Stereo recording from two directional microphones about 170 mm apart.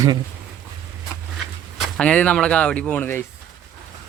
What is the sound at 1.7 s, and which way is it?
Speech, 5° left (ahead or behind).